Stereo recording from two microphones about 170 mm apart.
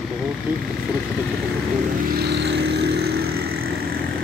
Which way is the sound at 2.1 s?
70° right (ahead or behind).